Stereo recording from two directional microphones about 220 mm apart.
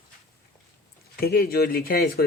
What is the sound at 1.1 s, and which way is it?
Speech, 45° left (ahead or behind).